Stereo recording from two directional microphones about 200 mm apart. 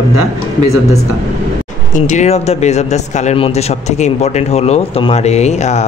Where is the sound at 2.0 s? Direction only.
35° left (ahead or behind).